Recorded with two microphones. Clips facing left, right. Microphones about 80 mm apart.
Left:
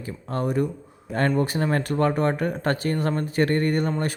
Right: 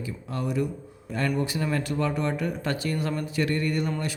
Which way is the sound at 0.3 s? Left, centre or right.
Left.